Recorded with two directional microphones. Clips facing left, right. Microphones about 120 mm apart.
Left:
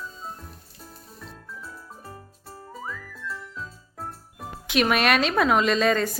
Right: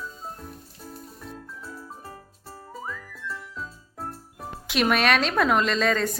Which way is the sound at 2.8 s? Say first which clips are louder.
Even; centre (ahead or behind).